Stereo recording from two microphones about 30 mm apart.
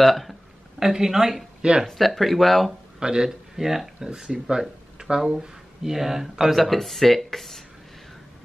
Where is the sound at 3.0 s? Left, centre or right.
Right.